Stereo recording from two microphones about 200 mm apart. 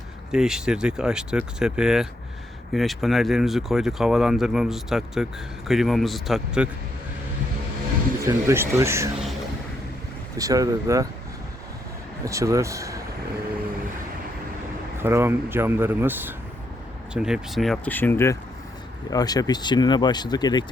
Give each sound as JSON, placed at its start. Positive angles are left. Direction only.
{"t": 0.3, "sound": "speech", "side_deg": -5}
{"t": 8.2, "sound": "speech", "side_deg": -15}
{"t": 10.3, "sound": "speech", "side_deg": -15}
{"t": 12.2, "sound": "speech", "side_deg": -15}
{"t": 14.9, "sound": "speech", "side_deg": -10}